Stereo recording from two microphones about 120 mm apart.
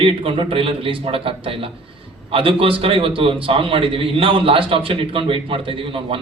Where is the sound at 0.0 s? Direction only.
50° right (ahead or behind).